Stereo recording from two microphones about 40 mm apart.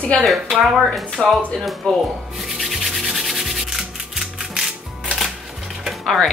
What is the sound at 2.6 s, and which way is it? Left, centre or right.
Sanding, centre.